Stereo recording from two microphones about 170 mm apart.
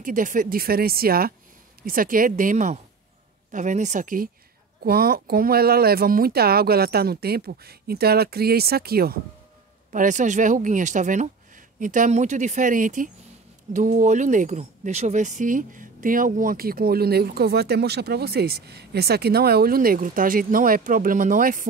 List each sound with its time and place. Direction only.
0.0 s speech: 50° right (ahead or behind)
4.8 s speech: 65° right (ahead or behind)
9.9 s speech: 45° right (ahead or behind)